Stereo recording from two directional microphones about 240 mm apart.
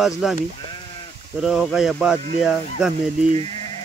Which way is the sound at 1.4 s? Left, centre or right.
Centre.